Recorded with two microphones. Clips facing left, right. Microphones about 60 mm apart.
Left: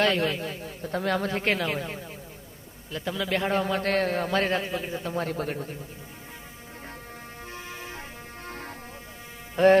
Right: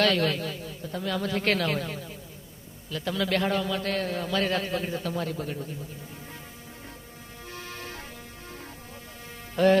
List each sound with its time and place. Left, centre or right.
0.0 s a man's voice: left
1.4 s a man's voice: centre
1.9 s a man's voice: left
3.4 s a man's voice: left
4.6 s a man's voice: centre
5.0 s a man's voice: left
7.5 s music: centre
8.5 s music: left
9.6 s speech: left